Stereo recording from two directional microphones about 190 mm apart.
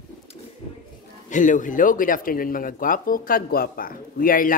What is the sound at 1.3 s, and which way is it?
Speech, 40° left (ahead or behind).